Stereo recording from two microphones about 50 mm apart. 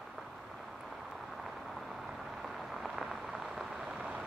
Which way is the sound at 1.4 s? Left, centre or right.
Centre.